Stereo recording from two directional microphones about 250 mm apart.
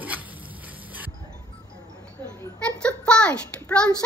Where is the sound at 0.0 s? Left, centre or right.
Centre.